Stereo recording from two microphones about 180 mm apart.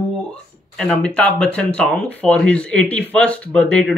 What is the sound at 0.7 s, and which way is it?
Speech, 5° left (ahead or behind).